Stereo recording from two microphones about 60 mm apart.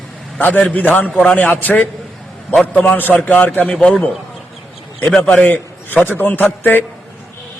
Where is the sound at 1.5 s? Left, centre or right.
Left.